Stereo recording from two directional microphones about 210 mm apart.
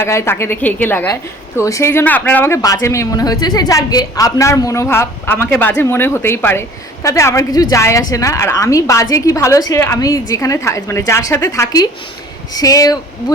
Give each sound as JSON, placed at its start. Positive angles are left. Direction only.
{"t": 0.0, "sound": "a woman's voice", "side_deg": 10}